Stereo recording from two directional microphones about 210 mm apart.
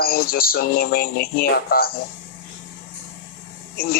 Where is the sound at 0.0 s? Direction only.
45° left (ahead or behind).